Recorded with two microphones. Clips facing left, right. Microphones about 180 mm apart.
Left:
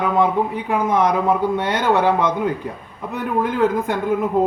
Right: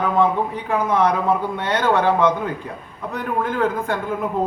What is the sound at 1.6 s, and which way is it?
Speech, 15° left (ahead or behind).